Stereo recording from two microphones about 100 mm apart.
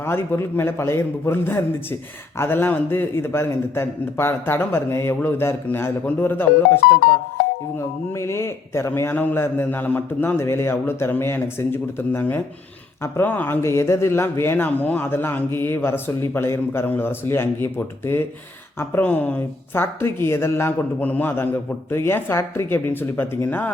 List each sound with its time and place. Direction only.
0.0 s speech: 25° left (ahead or behind)
7.8 s speech: 25° left (ahead or behind)